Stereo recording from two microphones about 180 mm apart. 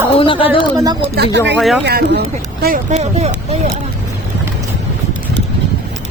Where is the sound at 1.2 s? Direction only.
75° right (ahead or behind).